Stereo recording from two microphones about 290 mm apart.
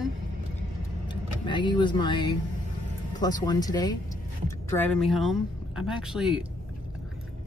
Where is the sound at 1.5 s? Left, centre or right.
Centre.